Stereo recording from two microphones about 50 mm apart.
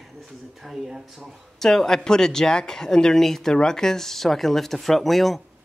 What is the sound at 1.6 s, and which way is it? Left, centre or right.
Speech, centre.